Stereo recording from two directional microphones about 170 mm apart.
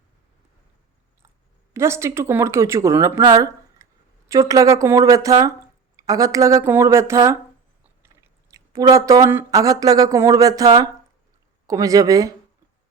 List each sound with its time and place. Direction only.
1.7 s a woman's voice: 15° right (ahead or behind)